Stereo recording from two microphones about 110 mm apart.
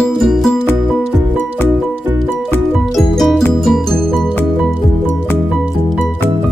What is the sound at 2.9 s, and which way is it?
Music, centre (ahead or behind).